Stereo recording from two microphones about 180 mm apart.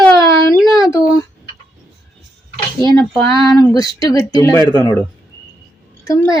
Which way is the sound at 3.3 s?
20° left (ahead or behind).